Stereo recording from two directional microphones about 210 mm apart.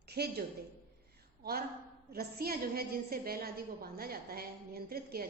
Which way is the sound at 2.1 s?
45° right (ahead or behind).